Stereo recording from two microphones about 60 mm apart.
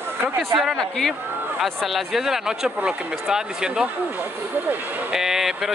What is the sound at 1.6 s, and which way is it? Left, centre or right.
Speech, centre.